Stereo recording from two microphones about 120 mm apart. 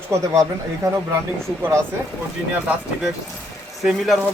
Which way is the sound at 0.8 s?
25° right (ahead or behind).